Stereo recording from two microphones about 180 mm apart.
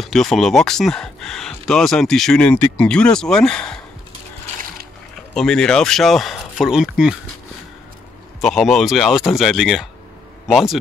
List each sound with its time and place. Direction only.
0.0 s speech: centre (ahead or behind)
5.3 s speech: 5° left (ahead or behind)
8.4 s speech: centre (ahead or behind)